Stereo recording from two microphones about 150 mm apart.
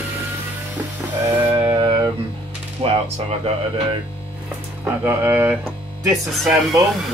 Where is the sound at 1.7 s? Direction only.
30° right (ahead or behind).